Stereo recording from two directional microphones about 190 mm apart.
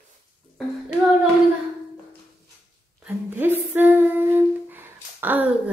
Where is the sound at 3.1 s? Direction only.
10° right (ahead or behind).